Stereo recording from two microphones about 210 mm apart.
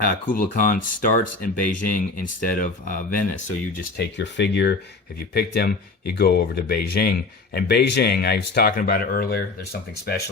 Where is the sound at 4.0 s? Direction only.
55° left (ahead or behind).